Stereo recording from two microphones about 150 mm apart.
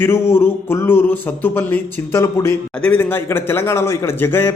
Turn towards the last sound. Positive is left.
turn(degrees=15)  # may be behind; listen again after turning